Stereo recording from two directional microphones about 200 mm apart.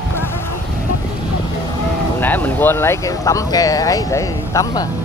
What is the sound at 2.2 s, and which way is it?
Speech, 10° left (ahead or behind).